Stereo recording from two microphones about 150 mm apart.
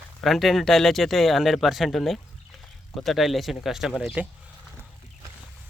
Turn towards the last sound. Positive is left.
turn(degrees=-5)  # may be behind; listen again after turning